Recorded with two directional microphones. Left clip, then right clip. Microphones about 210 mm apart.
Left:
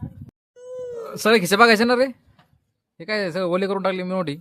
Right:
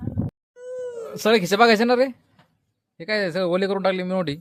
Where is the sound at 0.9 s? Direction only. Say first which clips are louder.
Left 2 dB; 10° left (ahead or behind).